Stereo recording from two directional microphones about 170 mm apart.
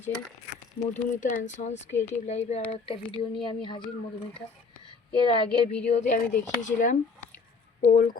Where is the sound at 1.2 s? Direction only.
50° left (ahead or behind); by 3.8 s 30° left (ahead or behind).